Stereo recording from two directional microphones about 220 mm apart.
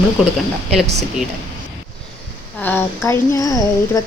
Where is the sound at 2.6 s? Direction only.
10° left (ahead or behind).